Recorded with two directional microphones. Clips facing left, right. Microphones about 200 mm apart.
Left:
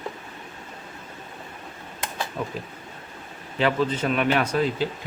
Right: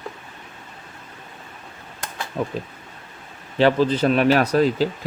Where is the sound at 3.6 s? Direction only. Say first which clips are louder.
Right 6 dB; 30° right (ahead or behind).